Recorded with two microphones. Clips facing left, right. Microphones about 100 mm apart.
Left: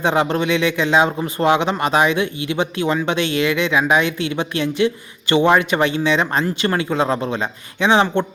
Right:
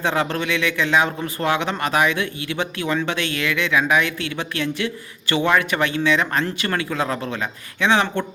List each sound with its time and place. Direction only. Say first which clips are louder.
0.0 s speech: left 4 dB; 20° left (ahead or behind)